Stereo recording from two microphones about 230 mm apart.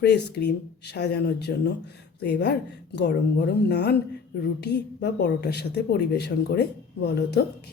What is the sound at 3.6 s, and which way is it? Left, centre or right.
A woman's voice, left.